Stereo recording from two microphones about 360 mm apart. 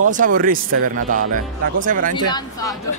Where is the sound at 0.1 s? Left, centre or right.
Right.